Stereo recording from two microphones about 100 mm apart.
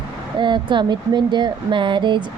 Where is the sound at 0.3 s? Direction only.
50° right (ahead or behind).